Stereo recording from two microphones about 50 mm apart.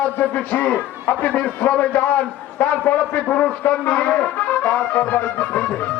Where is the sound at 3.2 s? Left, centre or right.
Left.